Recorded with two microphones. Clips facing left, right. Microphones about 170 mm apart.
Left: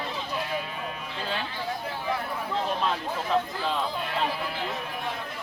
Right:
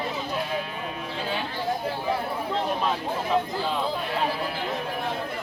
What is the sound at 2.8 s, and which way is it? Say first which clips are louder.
Speech: right 2 dB; 5° right (ahead or behind).